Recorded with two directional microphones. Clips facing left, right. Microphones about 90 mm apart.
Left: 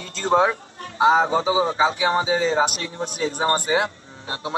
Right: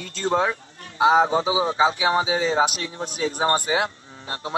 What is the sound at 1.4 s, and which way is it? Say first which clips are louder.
Speech: left 2 dB; 45° left (ahead or behind).